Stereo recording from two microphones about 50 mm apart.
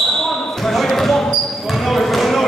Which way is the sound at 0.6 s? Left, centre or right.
Centre.